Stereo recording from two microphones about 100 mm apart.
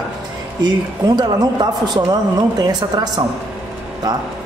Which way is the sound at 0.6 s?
45° right (ahead or behind).